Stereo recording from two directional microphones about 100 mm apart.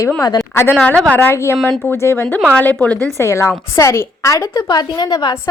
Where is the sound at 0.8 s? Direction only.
10° left (ahead or behind).